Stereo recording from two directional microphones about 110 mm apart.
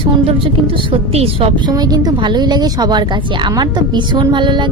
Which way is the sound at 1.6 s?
35° right (ahead or behind).